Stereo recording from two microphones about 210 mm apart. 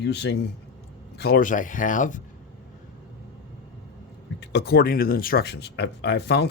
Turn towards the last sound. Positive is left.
turn(degrees=55)  # may be behind; listen again after turning